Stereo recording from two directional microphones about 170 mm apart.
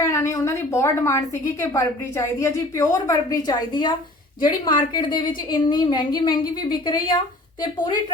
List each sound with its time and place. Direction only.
0.0 s a woman's voice: 15° left (ahead or behind)